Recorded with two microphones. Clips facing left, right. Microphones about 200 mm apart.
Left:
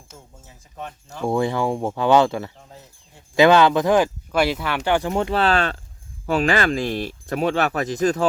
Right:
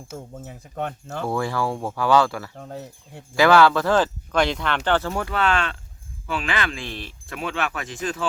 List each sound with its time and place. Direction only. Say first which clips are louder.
0.3 s speech: right 6 dB; 60° right (ahead or behind)
1.2 s speech: left 4 dB; 20° left (ahead or behind)
2.6 s speech: right 10 dB; 60° right (ahead or behind)
3.3 s speech: left 2 dB; 20° left (ahead or behind); by 8.2 s 40° left (ahead or behind)